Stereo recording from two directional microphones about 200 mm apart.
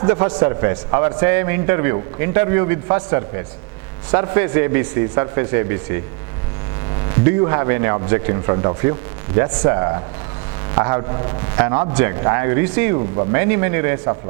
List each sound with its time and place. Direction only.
0.0 s a man's voice: 20° right (ahead or behind)